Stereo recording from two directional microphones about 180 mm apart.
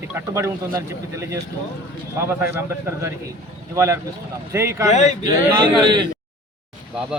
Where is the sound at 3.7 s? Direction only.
15° right (ahead or behind).